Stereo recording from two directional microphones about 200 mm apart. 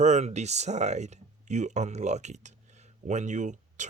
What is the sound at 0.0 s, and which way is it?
Speech, 35° right (ahead or behind).